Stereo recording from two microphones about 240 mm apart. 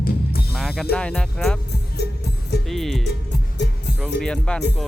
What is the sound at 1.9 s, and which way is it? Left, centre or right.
Music, left.